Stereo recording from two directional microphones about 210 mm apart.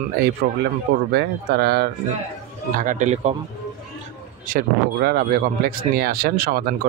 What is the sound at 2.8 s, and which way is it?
Speech, 35° right (ahead or behind).